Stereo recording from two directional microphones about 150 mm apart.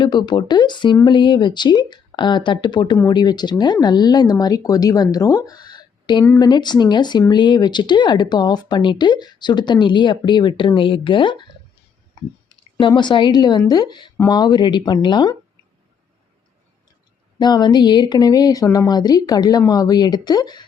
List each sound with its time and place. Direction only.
0.0 s speech: 30° left (ahead or behind)
6.2 s speech: 15° left (ahead or behind)
6.5 s speech: 30° left (ahead or behind)
12.5 s a woman's voice: 25° left (ahead or behind)
17.3 s speech: 30° left (ahead or behind)